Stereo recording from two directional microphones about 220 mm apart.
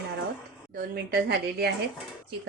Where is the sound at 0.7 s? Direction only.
45° right (ahead or behind).